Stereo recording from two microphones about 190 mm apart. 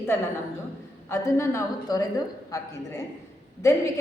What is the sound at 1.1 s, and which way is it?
A woman's voice, 15° left (ahead or behind).